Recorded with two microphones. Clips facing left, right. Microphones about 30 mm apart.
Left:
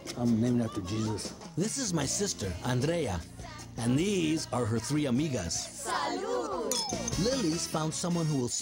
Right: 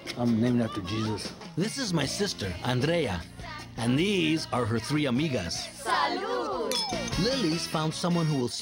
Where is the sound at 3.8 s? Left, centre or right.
Right.